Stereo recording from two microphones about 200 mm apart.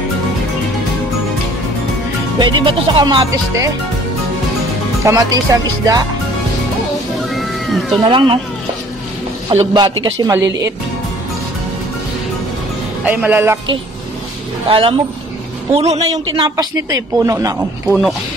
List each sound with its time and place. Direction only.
2.3 s a man's voice: 20° right (ahead or behind)
5.0 s speech: 15° right (ahead or behind)
7.2 s cat: centre (ahead or behind)
8.1 s a man's voice: 25° right (ahead or behind)
9.6 s a man's voice: 25° right (ahead or behind)
13.0 s speech: 10° right (ahead or behind)
14.7 s a man's voice: 25° right (ahead or behind)
16.1 s a man's voice: 20° right (ahead or behind)